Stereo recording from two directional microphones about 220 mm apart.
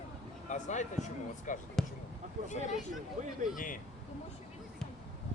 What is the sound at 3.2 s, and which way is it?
Speech, 35° right (ahead or behind).